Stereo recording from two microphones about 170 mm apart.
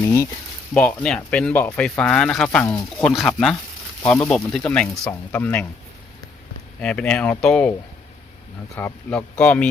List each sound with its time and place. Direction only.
0.7 s speech: 5° left (ahead or behind)
6.8 s speech: 5° left (ahead or behind)
8.7 s speech: 10° left (ahead or behind)